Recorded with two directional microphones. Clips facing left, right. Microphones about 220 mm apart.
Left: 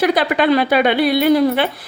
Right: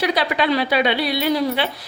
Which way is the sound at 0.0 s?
50° left (ahead or behind).